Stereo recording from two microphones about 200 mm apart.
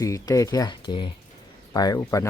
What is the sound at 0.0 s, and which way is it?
Speech, 15° left (ahead or behind).